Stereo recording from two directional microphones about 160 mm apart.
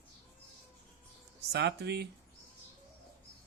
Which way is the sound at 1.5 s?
90° right.